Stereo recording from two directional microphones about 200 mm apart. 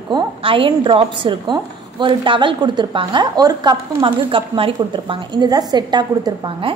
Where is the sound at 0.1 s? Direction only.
25° right (ahead or behind).